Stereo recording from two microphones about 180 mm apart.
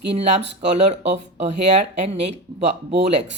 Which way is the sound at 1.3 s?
35° right (ahead or behind).